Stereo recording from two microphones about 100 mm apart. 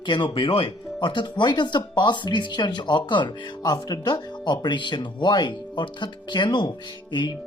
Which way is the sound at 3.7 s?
40° left (ahead or behind).